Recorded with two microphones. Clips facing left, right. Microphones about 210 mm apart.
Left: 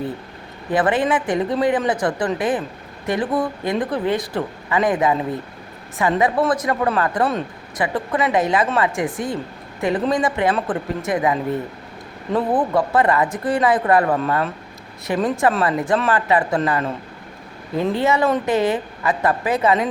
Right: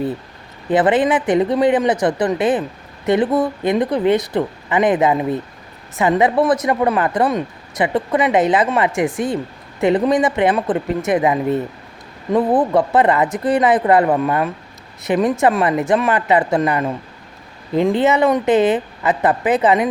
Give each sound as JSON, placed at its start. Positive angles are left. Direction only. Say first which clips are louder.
{"t": 0.7, "sound": "speech", "louder": "right 4 dB", "side_deg": -20}